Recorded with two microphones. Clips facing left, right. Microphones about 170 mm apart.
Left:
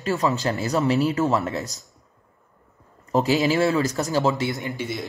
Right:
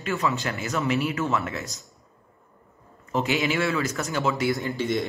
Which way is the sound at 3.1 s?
35° left (ahead or behind).